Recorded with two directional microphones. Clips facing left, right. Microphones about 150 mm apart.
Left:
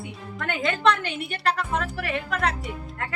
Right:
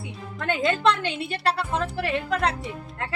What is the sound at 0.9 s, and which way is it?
A woman's voice, 30° right (ahead or behind).